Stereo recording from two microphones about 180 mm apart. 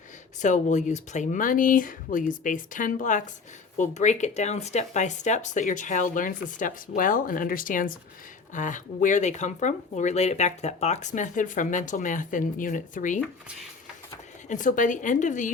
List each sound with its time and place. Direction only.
0.4 s speech: 45° left (ahead or behind)
14.5 s speech: 45° left (ahead or behind)